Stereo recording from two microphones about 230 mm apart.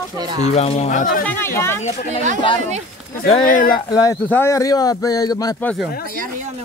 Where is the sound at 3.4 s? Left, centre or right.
Left.